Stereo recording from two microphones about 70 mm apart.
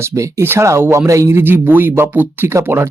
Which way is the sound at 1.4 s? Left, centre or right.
Right.